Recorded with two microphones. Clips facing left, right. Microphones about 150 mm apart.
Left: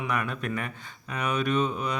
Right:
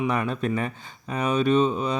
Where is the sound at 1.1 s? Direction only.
30° right (ahead or behind).